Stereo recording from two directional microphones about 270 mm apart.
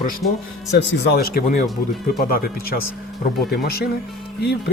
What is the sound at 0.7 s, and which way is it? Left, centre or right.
Speech, left.